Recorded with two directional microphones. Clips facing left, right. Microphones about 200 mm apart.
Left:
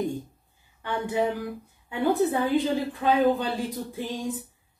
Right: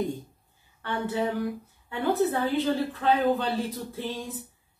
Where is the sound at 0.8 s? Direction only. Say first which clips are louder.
Left 2 dB; 15° left (ahead or behind).